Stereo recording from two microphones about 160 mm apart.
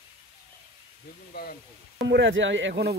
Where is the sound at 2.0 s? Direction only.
90° right.